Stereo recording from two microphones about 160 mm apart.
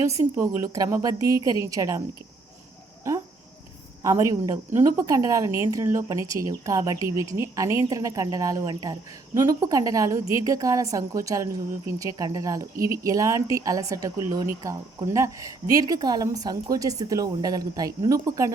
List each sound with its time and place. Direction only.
0.0 s a woman's voice: 20° right (ahead or behind)
4.0 s a woman's voice: 20° right (ahead or behind)